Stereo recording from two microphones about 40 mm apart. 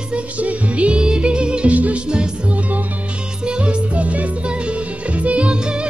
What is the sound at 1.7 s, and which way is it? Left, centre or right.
Music, right.